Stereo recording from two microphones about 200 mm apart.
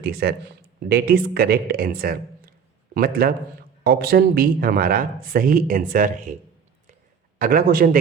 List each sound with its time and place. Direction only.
0.0 s speech: 55° right (ahead or behind)
7.3 s speech: 45° right (ahead or behind)